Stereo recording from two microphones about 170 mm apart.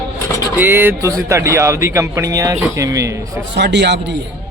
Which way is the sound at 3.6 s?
85° right.